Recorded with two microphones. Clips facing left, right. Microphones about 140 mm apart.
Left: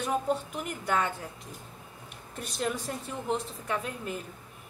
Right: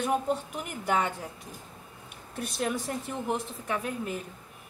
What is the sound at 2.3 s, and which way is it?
A woman's voice, 5° right (ahead or behind).